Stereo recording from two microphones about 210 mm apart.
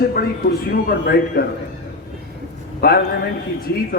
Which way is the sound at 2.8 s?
45° left (ahead or behind).